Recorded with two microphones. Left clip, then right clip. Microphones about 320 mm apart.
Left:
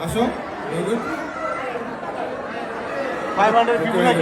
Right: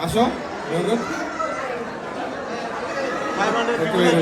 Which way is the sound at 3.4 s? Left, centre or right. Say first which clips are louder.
Left 6 dB; left.